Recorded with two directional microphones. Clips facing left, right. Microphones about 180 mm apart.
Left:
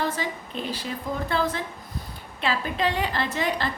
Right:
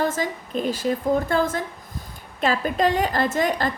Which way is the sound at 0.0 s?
45° right (ahead or behind).